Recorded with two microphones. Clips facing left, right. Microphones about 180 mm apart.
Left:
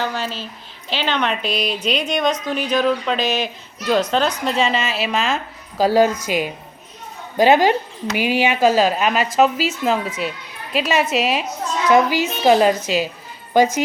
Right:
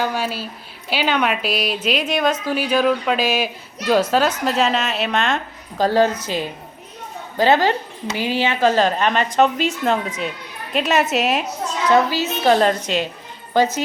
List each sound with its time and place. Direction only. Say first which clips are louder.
0.0 s a woman's voice: right 2 dB; 10° right (ahead or behind)
11.9 s speech: left 1 dB; 15° left (ahead or behind)